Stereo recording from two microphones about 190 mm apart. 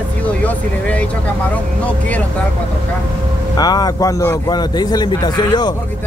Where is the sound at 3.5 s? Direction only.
20° left (ahead or behind).